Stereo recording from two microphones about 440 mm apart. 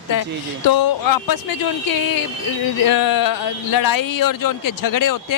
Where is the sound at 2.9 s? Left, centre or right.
Left.